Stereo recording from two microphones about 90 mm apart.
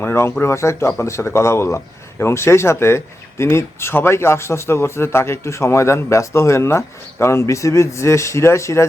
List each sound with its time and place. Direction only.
0.0 s speech: 25° left (ahead or behind)